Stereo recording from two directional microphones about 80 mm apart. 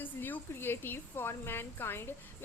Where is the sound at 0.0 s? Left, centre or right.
Left.